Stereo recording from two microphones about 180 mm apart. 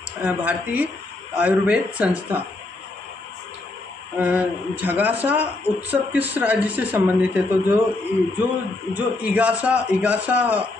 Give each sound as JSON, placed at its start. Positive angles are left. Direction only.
{"t": 0.2, "sound": "speech", "side_deg": -10}
{"t": 4.2, "sound": "speech", "side_deg": -10}
{"t": 8.9, "sound": "speech", "side_deg": -10}